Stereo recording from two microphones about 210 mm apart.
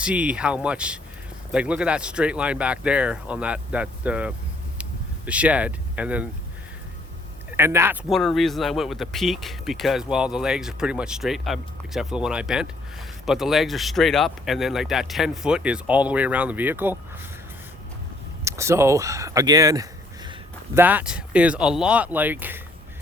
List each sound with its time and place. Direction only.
0.0 s speech: 5° right (ahead or behind)
4.8 s a sound: 5° right (ahead or behind)
7.5 s speech: 10° right (ahead or behind)
8.1 s speech: centre (ahead or behind)
18.4 s speech: 15° right (ahead or behind)